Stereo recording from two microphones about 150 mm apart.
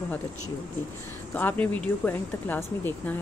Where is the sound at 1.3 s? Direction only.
10° left (ahead or behind).